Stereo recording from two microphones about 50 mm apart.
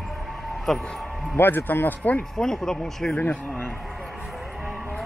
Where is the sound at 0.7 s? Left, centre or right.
Centre.